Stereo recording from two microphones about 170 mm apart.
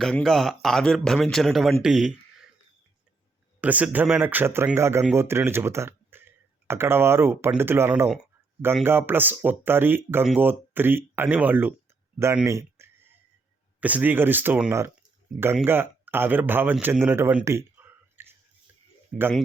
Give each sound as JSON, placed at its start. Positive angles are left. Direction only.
{"t": 0.0, "sound": "speech", "side_deg": 0}
{"t": 3.6, "sound": "speech", "side_deg": -10}
{"t": 12.2, "sound": "a sound", "side_deg": -15}
{"t": 13.7, "sound": "speech", "side_deg": -10}